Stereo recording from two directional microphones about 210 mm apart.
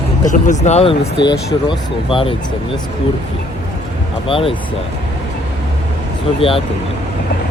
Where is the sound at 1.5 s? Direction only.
25° left (ahead or behind).